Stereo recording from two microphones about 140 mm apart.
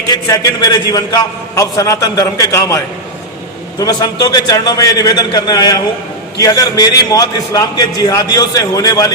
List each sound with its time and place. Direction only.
0.1 s a man's voice: 25° left (ahead or behind)